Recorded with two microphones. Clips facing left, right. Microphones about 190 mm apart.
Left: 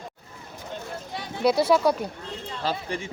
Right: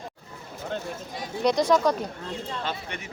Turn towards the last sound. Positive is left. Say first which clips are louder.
# left 4 dB
turn(degrees=30)  # may be behind; listen again after turning